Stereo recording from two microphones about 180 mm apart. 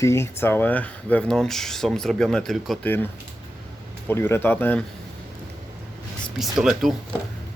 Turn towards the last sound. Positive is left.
turn(degrees=0)  # may be behind; listen again after turning